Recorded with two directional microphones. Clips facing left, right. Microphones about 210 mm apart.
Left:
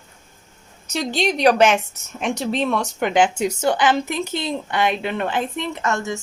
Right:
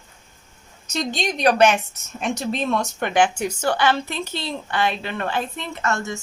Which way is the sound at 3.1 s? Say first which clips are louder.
Left 1 dB; 20° left (ahead or behind).